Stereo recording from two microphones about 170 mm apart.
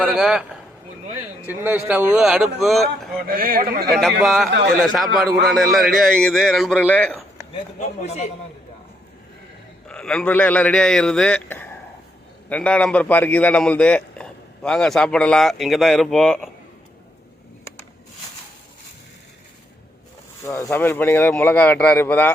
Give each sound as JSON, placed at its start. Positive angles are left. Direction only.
{"t": 0.0, "sound": "a man's voice", "side_deg": -5}
{"t": 1.5, "sound": "a man's voice", "side_deg": -10}
{"t": 3.2, "sound": "speech", "side_deg": -60}
{"t": 4.2, "sound": "a man's voice", "side_deg": 0}
{"t": 7.8, "sound": "a man's voice", "side_deg": 40}
{"t": 9.8, "sound": "a man's voice", "side_deg": 5}
{"t": 20.4, "sound": "speech", "side_deg": 15}